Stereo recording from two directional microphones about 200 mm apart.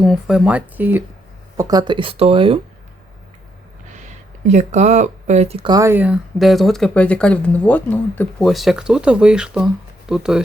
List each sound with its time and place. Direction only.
0.0 s speech: centre (ahead or behind)
1.5 s speech: 20° right (ahead or behind)
4.4 s speech: 35° right (ahead or behind)
5.7 s speech: 15° right (ahead or behind)